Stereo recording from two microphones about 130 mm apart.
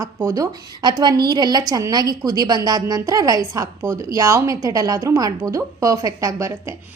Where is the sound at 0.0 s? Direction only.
25° right (ahead or behind).